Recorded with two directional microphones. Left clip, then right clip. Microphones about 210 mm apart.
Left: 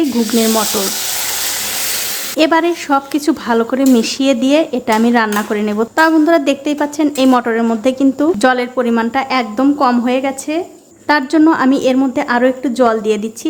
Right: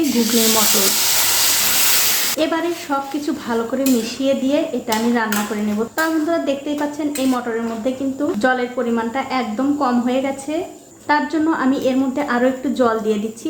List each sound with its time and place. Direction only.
2.4 s a woman's voice: 35° left (ahead or behind)